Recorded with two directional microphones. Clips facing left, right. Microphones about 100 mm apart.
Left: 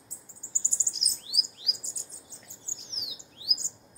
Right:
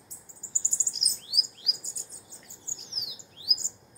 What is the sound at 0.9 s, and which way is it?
Chirp, 50° right (ahead or behind).